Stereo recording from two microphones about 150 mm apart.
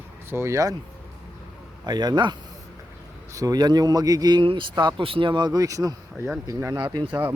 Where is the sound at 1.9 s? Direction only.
30° right (ahead or behind).